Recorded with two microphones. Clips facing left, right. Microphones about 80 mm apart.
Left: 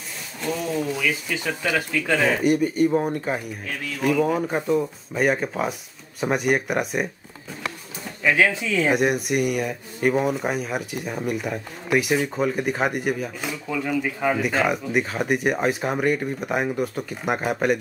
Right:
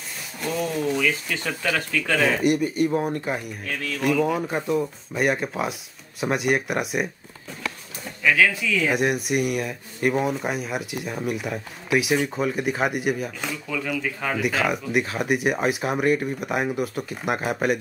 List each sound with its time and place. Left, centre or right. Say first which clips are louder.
0.4 s speech: even; centre
2.2 s speech: left 1 dB; centre
8.2 s speech: even; left
8.9 s speech: left 1 dB; centre
13.7 s speech: left 4 dB; centre
14.4 s speech: left 1 dB; centre